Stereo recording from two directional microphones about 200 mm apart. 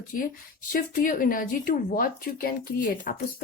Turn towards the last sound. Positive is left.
turn(degrees=45)  # may be behind; listen again after turning